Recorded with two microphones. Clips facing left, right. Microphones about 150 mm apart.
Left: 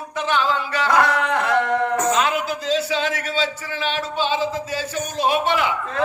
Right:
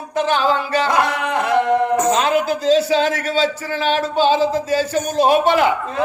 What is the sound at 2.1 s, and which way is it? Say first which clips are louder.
A man's voice: right 4 dB; 35° right (ahead or behind).